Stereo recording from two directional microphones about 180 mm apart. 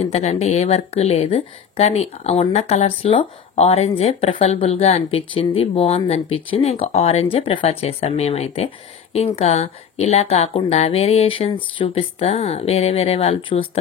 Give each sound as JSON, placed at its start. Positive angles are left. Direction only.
{"t": 0.0, "sound": "speech", "side_deg": 40}